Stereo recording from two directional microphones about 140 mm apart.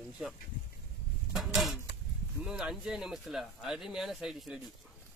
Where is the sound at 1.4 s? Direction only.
Centre (ahead or behind).